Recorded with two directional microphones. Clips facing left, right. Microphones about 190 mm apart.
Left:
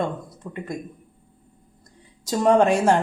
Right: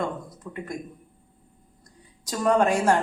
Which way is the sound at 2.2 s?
25° left (ahead or behind).